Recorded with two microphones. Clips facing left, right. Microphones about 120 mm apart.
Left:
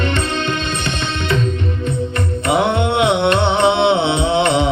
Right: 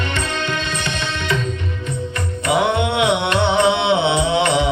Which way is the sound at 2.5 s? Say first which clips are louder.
Left 1 dB; 25° left (ahead or behind).